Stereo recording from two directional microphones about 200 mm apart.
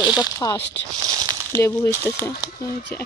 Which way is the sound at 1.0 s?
20° right (ahead or behind).